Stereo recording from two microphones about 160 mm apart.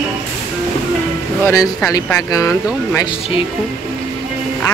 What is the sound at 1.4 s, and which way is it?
Speech, 20° left (ahead or behind).